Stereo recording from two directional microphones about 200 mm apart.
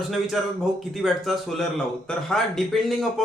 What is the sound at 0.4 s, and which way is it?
A man's voice, centre (ahead or behind).